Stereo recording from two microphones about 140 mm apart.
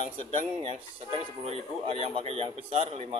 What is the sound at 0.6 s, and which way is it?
Speech, 40° right (ahead or behind).